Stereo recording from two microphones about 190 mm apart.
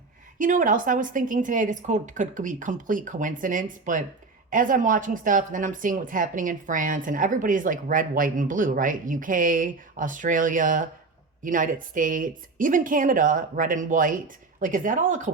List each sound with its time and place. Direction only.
0.3 s a woman's voice: 45° right (ahead or behind)